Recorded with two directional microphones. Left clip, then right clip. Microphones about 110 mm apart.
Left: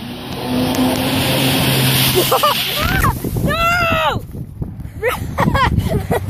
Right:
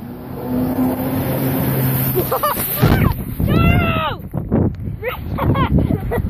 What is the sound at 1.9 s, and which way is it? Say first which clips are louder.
Vehicle: left 8 dB; centre (ahead or behind).